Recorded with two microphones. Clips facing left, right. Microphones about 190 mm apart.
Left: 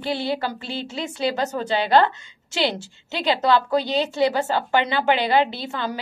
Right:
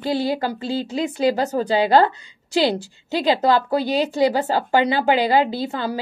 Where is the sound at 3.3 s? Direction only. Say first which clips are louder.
Right 1 dB; 35° right (ahead or behind).